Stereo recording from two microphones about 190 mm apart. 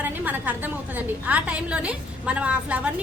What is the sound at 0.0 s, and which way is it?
A woman's voice, 10° right (ahead or behind).